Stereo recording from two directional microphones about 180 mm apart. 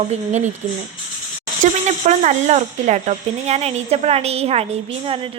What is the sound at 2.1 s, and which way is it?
Speech, 40° right (ahead or behind).